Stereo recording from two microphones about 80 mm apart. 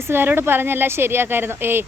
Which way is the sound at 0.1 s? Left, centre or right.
Right.